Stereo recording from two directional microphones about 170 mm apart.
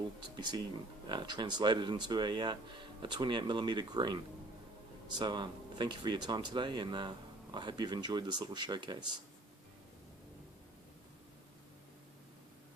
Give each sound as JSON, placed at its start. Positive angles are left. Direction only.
{"t": 0.3, "sound": "speech", "side_deg": -25}